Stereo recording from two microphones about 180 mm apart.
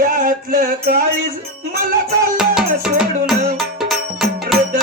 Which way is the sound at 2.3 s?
5° right (ahead or behind).